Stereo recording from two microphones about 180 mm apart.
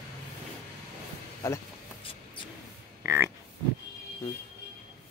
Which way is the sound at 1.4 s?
15° left (ahead or behind).